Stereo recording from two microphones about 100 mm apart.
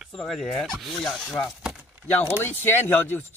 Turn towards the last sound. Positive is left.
turn(degrees=20)  # may be behind; listen again after turning